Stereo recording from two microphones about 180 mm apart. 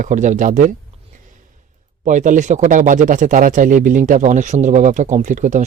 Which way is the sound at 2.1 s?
45° right (ahead or behind).